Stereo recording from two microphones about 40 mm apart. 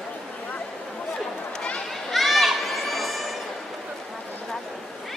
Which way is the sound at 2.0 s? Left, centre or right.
Centre.